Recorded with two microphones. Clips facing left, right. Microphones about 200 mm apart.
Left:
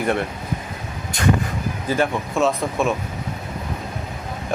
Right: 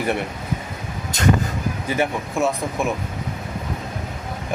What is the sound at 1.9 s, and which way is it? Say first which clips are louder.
Speech: left 2 dB; 15° right (ahead or behind).